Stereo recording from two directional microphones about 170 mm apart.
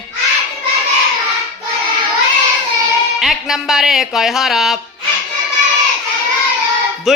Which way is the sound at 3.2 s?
Centre (ahead or behind).